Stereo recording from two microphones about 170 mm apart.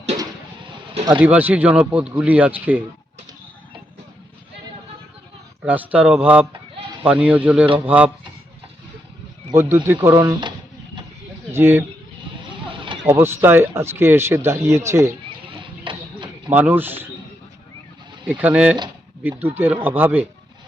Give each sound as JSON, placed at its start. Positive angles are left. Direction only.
{"t": 1.2, "sound": "speech", "side_deg": -10}
{"t": 5.6, "sound": "speech", "side_deg": -10}
{"t": 9.8, "sound": "speech", "side_deg": -15}
{"t": 11.5, "sound": "speech", "side_deg": -15}
{"t": 12.7, "sound": "a sound", "side_deg": -30}
{"t": 13.1, "sound": "speech", "side_deg": -15}
{"t": 15.4, "sound": "a sound", "side_deg": -30}
{"t": 16.5, "sound": "speech", "side_deg": -10}
{"t": 18.3, "sound": "speech", "side_deg": -10}